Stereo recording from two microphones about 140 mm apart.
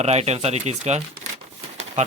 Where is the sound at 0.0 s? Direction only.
50° right (ahead or behind).